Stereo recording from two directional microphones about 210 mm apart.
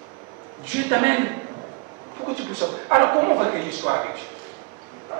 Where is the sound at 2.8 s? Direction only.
20° right (ahead or behind).